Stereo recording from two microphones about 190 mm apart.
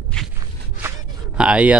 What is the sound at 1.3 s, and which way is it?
Speech, 5° right (ahead or behind).